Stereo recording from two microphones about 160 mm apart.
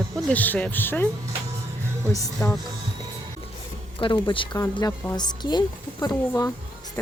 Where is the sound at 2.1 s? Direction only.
20° left (ahead or behind).